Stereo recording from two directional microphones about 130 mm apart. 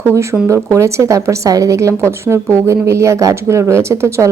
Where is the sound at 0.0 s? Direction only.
20° right (ahead or behind).